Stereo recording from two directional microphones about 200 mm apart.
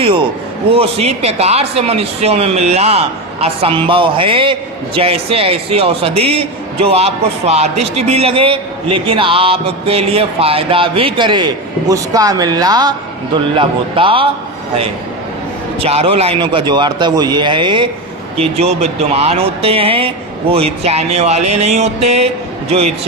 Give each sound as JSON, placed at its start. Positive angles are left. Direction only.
{"t": 0.0, "sound": "a man's voice", "side_deg": -25}
{"t": 15.8, "sound": "a man's voice", "side_deg": -30}